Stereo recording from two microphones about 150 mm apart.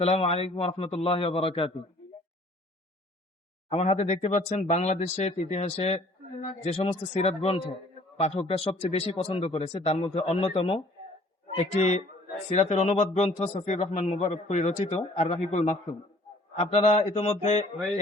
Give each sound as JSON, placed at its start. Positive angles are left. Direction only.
{"t": 0.0, "sound": "a man's voice", "side_deg": 45}
{"t": 3.7, "sound": "speech", "side_deg": 45}